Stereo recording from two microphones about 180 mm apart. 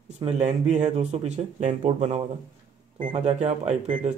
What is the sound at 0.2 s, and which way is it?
Speech, 40° right (ahead or behind).